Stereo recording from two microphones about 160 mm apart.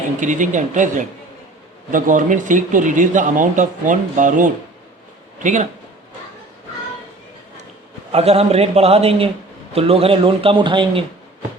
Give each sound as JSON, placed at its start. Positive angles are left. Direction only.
{"t": 0.2, "sound": "speech", "side_deg": -50}
{"t": 8.1, "sound": "a man's voice", "side_deg": -40}